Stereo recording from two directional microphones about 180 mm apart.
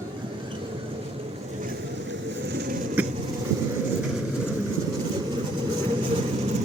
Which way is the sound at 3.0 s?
10° right (ahead or behind).